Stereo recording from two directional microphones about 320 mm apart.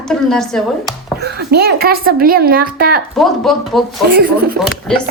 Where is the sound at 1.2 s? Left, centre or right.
Right.